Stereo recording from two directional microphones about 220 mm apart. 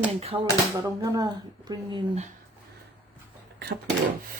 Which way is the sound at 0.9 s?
15° right (ahead or behind).